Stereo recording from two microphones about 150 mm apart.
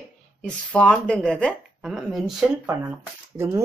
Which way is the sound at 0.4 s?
5° left (ahead or behind).